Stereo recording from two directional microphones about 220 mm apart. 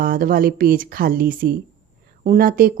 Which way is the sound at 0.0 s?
40° right (ahead or behind).